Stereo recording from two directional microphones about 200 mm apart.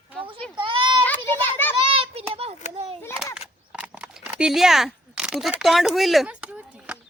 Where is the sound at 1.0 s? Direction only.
10° left (ahead or behind).